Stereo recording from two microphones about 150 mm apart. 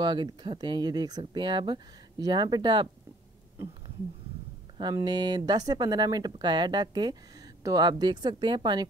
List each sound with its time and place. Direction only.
0.0 s speech: 30° right (ahead or behind)
4.9 s speech: 30° right (ahead or behind)